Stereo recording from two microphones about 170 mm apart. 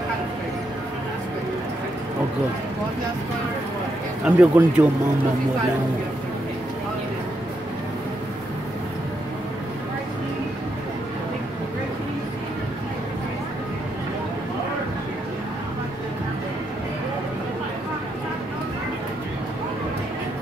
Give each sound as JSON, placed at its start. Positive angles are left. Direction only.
{"t": 4.2, "sound": "a man's voice", "side_deg": -5}